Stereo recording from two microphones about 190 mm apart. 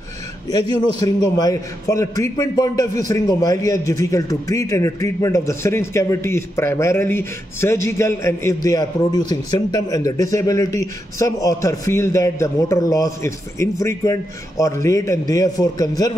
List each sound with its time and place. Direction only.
0.5 s a man's voice: 20° left (ahead or behind)